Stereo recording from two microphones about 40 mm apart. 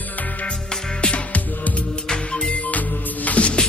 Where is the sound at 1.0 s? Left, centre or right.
Left.